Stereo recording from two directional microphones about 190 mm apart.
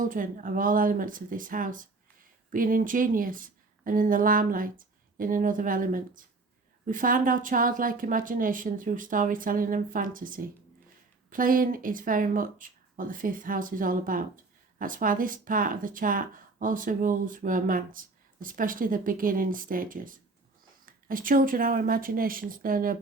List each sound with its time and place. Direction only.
0.0 s speech: 45° right (ahead or behind)